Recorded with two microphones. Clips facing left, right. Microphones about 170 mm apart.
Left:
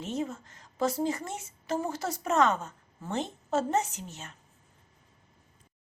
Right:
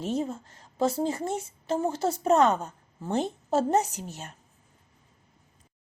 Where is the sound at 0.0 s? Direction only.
35° right (ahead or behind).